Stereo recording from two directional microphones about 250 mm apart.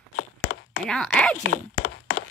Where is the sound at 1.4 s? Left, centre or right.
Left.